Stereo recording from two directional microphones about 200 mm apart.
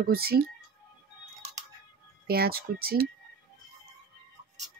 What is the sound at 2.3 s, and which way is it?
Speech, 50° right (ahead or behind).